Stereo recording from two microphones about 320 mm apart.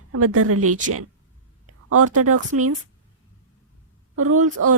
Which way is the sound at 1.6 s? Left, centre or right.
Right.